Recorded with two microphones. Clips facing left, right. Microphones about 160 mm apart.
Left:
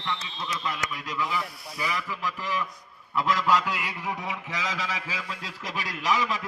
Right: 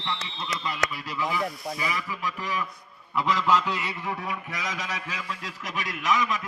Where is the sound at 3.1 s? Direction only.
5° left (ahead or behind).